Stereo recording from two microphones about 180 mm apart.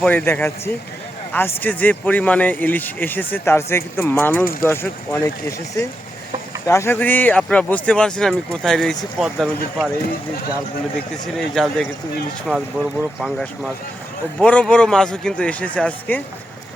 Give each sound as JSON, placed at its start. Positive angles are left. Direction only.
{"t": 0.0, "sound": "speech", "side_deg": 10}
{"t": 6.7, "sound": "speech", "side_deg": 15}
{"t": 11.3, "sound": "speech", "side_deg": 0}